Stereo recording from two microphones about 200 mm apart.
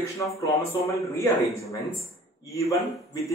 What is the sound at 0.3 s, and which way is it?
Speech, 15° left (ahead or behind).